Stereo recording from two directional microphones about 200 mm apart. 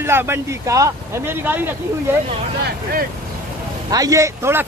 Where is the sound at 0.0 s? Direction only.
10° right (ahead or behind).